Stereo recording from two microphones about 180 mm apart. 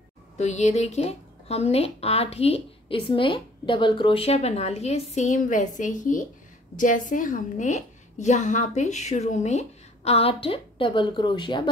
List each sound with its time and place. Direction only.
0.4 s a woman's voice: 40° left (ahead or behind)